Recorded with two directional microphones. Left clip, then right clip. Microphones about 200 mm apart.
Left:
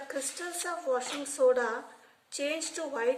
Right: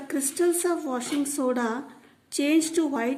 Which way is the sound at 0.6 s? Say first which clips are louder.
Right 4 dB; 45° right (ahead or behind).